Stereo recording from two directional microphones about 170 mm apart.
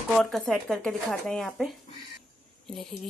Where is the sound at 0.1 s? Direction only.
Centre (ahead or behind).